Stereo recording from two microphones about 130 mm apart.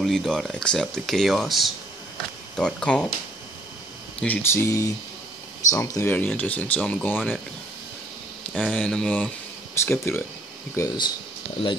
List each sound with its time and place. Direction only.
0.0 s speech: 5° left (ahead or behind)
4.2 s speech: 15° left (ahead or behind)
8.5 s speech: 10° left (ahead or behind)
9.8 s speech: 20° left (ahead or behind)